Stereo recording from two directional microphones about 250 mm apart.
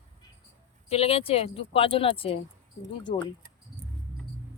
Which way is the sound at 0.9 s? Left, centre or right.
Left.